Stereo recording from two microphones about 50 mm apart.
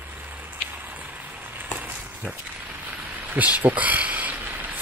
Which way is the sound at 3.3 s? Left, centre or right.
Right.